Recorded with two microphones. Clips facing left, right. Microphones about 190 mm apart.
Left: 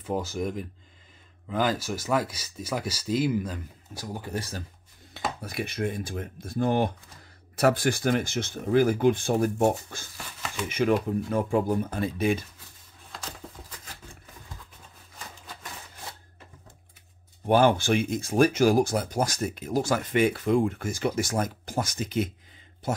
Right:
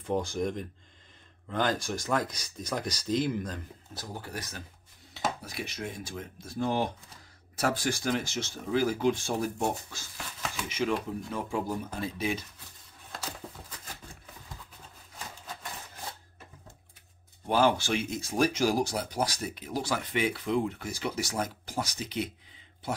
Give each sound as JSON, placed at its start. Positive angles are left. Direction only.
{"t": 0.0, "sound": "speech", "side_deg": 5}
{"t": 4.3, "sound": "speech", "side_deg": 30}
{"t": 5.4, "sound": "speech", "side_deg": 55}
{"t": 17.5, "sound": "speech", "side_deg": 55}